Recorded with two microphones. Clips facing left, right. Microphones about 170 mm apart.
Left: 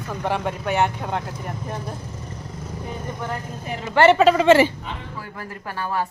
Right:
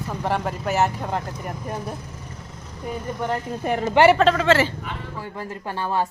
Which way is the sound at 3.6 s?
55° right (ahead or behind).